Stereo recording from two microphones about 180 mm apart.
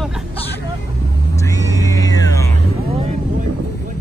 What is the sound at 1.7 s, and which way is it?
Music, 20° left (ahead or behind).